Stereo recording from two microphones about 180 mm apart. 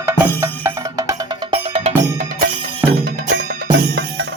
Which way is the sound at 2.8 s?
10° right (ahead or behind).